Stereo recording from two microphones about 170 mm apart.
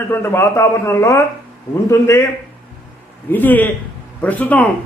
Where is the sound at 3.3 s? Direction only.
10° left (ahead or behind).